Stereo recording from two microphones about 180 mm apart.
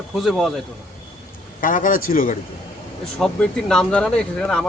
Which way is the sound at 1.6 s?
50° left (ahead or behind).